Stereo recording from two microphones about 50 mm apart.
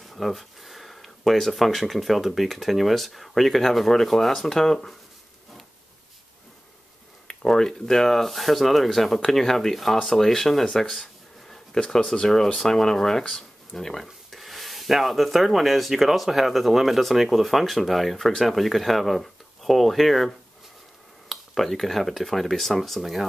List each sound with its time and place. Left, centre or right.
0.0 s speech: centre
7.2 s speech: centre